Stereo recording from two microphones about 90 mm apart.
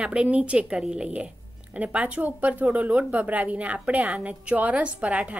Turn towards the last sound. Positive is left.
turn(degrees=-15)  # may be behind; listen again after turning